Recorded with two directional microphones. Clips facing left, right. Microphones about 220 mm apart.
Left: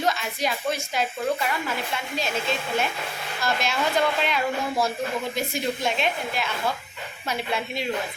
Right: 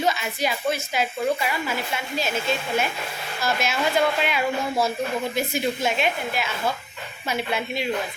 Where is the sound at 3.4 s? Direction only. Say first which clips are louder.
Right 1 dB; 5° right (ahead or behind).